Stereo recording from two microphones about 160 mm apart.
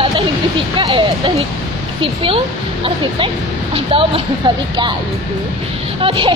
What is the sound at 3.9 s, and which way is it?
Speech, 35° right (ahead or behind).